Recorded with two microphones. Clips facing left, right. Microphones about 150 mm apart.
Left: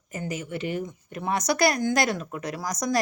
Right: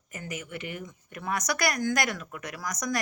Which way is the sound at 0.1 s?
30° left (ahead or behind).